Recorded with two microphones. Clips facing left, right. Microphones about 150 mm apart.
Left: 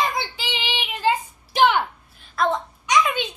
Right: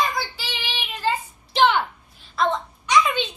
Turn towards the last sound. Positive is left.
turn(degrees=10)  # may be behind; listen again after turning